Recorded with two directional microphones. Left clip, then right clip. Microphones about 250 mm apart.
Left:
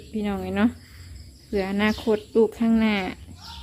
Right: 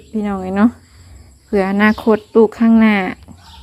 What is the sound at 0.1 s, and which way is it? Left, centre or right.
Speech, centre.